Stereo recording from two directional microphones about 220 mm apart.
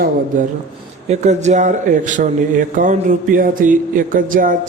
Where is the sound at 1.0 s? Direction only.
30° right (ahead or behind).